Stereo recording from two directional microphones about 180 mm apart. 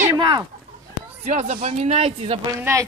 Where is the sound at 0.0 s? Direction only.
20° right (ahead or behind).